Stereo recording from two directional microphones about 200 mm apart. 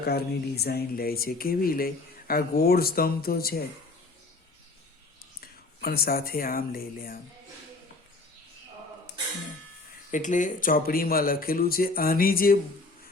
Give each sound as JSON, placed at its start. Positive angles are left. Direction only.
{"t": 0.0, "sound": "speech", "side_deg": 50}
{"t": 5.4, "sound": "speech", "side_deg": 50}
{"t": 10.1, "sound": "speech", "side_deg": 40}